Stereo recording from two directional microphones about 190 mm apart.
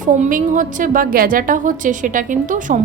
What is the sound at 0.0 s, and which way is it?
A woman's voice, 45° right (ahead or behind).